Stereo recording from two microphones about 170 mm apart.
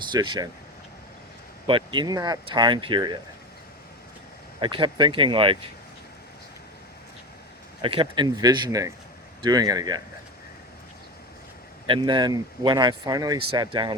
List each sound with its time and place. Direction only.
0.1 s speech: 25° right (ahead or behind)
1.6 s speech: 30° right (ahead or behind)
4.6 s speech: 25° right (ahead or behind)
7.8 s speech: 30° right (ahead or behind)
11.9 s speech: 25° right (ahead or behind)